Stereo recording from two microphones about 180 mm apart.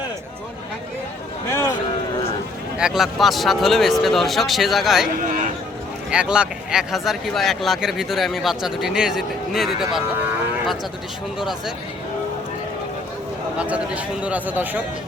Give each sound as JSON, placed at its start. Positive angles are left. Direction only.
{"t": 1.5, "sound": "a sound", "side_deg": 15}
{"t": 2.7, "sound": "speech", "side_deg": -5}
{"t": 6.1, "sound": "speech", "side_deg": -5}
{"t": 11.3, "sound": "speech", "side_deg": 0}
{"t": 13.6, "sound": "speech", "side_deg": -5}